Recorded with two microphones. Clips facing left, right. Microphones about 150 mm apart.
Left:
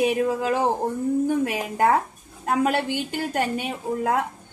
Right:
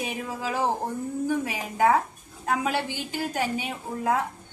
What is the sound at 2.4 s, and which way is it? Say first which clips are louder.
A woman's voice: left 4 dB; 55° left (ahead or behind).